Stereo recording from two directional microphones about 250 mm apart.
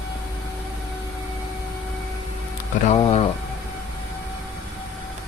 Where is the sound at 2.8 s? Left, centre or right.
Left.